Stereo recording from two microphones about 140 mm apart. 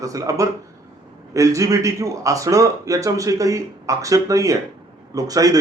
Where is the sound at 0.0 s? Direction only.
25° right (ahead or behind).